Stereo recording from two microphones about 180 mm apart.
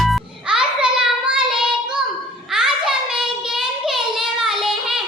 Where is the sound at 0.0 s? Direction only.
Centre (ahead or behind).